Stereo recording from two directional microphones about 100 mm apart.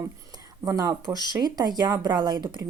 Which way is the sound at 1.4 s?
45° right (ahead or behind).